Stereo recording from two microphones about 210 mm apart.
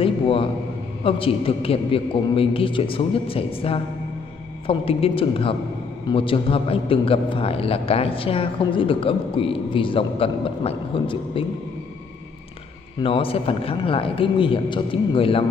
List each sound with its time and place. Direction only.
0.0 s a sound: 25° left (ahead or behind)
1.0 s a man's voice: 25° left (ahead or behind)
13.0 s a man's voice: 25° left (ahead or behind)